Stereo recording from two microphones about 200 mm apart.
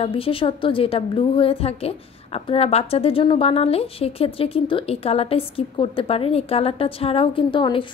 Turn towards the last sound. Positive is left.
turn(degrees=25)  # may be behind; listen again after turning